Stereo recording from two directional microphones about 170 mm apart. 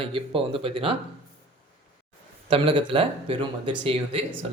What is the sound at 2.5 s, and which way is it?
Speech, 35° right (ahead or behind).